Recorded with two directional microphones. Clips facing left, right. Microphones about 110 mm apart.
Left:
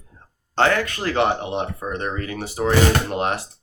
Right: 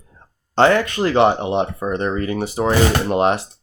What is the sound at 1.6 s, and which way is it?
Speech, 25° right (ahead or behind).